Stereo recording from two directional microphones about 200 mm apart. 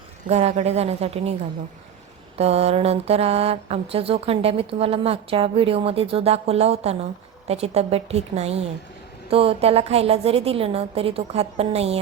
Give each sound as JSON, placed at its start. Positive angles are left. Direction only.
{"t": 0.3, "sound": "mantra", "side_deg": -35}
{"t": 2.4, "sound": "mantra", "side_deg": -30}
{"t": 4.8, "sound": "a woman's voice", "side_deg": -30}
{"t": 7.4, "sound": "mantra", "side_deg": -30}
{"t": 9.3, "sound": "a woman's voice", "side_deg": -30}